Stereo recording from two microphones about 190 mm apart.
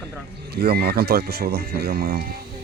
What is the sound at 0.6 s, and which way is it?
Speech, 55° right (ahead or behind).